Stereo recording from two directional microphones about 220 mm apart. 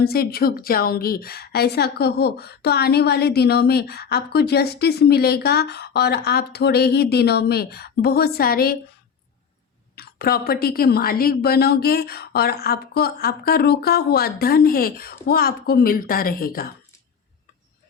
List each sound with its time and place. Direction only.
0.0 s a woman's voice: 45° left (ahead or behind)
9.9 s a woman's voice: 45° left (ahead or behind)